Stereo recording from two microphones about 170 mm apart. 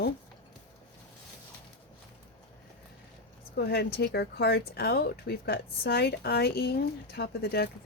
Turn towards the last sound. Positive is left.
turn(degrees=70)  # may be behind; listen again after turning